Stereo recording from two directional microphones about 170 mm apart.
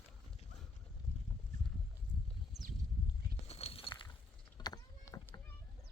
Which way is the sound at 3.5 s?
35° left (ahead or behind).